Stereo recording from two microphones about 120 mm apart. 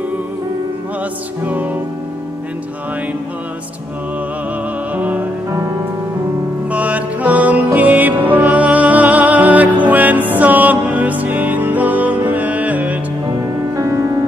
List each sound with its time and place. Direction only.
1.4 s music: 15° right (ahead or behind)
4.9 s music: 15° right (ahead or behind)
6.7 s music: 15° right (ahead or behind)
13.7 s music: 25° right (ahead or behind)